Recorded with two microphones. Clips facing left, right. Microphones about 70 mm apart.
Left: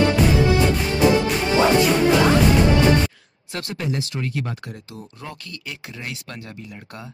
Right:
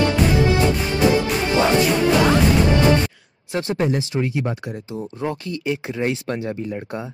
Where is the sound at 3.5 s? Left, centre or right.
Right.